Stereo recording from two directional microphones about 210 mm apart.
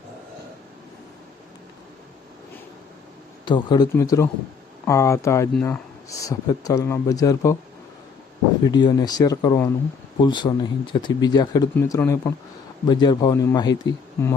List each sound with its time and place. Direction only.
3.4 s speech: 20° left (ahead or behind)
8.6 s speech: 20° left (ahead or behind)